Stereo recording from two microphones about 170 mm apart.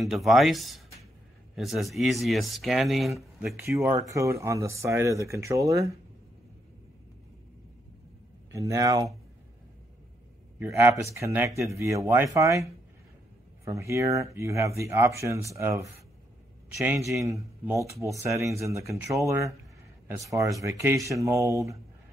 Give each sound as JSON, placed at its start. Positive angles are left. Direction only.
{"t": 0.0, "sound": "speech", "side_deg": 0}
{"t": 3.6, "sound": "speech", "side_deg": -15}
{"t": 8.5, "sound": "speech", "side_deg": -20}
{"t": 10.6, "sound": "speech", "side_deg": -15}
{"t": 20.2, "sound": "speech", "side_deg": -20}